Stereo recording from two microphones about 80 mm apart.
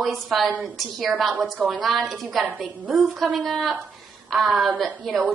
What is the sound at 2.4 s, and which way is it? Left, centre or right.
Speech, centre.